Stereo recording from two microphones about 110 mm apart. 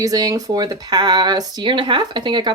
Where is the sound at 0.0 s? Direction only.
35° right (ahead or behind).